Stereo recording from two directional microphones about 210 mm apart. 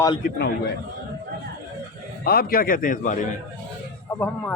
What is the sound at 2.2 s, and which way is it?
A man's voice, 45° left (ahead or behind).